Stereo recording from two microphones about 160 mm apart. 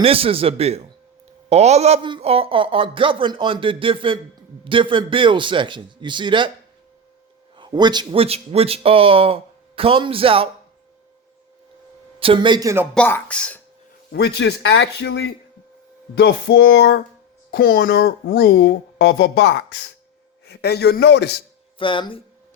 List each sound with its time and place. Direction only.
0.0 s a man's voice: 35° right (ahead or behind)
7.5 s speech: 30° right (ahead or behind)
12.2 s a man's voice: 30° right (ahead or behind); by 12.9 s 15° right (ahead or behind)
12.9 s speech: 10° left (ahead or behind)
14.1 s speech: 90° left
17.5 s speech: 65° left (ahead or behind); by 21.4 s 90° left
21.8 s speech: 30° left (ahead or behind)